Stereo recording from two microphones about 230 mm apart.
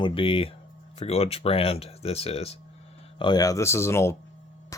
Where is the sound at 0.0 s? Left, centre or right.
Left.